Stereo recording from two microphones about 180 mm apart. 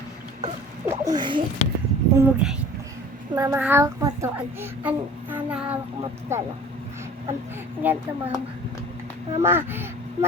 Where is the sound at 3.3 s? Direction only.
20° right (ahead or behind).